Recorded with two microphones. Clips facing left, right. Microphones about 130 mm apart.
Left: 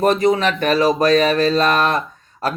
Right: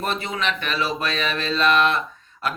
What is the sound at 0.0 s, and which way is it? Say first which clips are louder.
Speech: left 11 dB; 40° left (ahead or behind).